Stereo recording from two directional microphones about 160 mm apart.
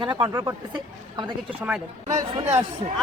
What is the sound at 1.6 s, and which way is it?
Speech, 10° right (ahead or behind).